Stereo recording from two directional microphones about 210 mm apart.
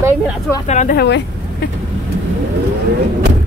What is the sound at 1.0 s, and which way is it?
Speech, 50° left (ahead or behind).